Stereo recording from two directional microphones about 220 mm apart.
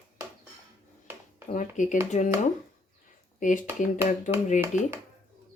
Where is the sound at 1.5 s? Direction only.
35° left (ahead or behind).